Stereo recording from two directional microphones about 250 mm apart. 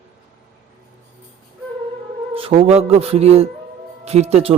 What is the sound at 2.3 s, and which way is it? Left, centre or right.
A man's voice, right.